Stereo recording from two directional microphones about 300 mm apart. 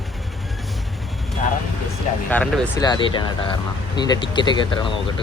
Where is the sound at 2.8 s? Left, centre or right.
Centre.